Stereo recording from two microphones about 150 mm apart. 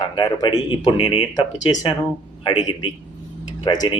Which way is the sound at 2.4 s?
35° left (ahead or behind).